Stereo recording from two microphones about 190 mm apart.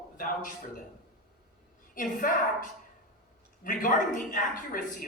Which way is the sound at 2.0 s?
45° left (ahead or behind).